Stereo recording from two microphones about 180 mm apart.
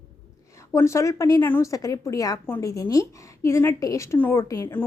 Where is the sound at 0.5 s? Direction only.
15° left (ahead or behind).